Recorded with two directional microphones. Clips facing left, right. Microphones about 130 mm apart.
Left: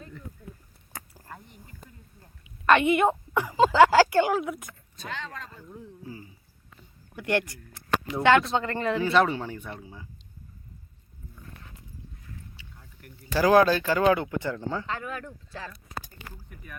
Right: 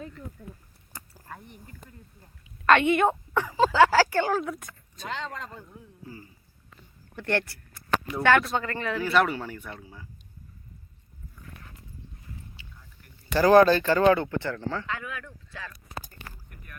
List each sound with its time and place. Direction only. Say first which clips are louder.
2.4 s a woman's voice: even; 5° left (ahead or behind)
5.0 s speech: right 3 dB; 30° right (ahead or behind)
7.1 s speech: left 1 dB; 10° left (ahead or behind)
13.3 s speech: right 2 dB; 5° left (ahead or behind)
14.8 s speech: left 2 dB; 35° left (ahead or behind)